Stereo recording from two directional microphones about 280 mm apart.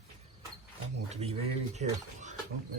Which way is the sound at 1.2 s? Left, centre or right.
Right.